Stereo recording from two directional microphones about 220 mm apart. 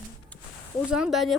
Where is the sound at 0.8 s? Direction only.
5° right (ahead or behind).